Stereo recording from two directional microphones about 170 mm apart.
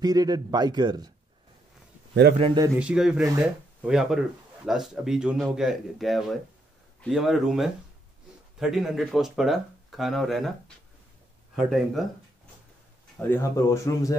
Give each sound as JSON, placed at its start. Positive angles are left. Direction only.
{"t": 0.0, "sound": "speech", "side_deg": -20}
{"t": 2.3, "sound": "a man's voice", "side_deg": -30}
{"t": 2.8, "sound": "speech", "side_deg": -5}
{"t": 11.5, "sound": "speech", "side_deg": 0}
{"t": 13.3, "sound": "speech", "side_deg": 15}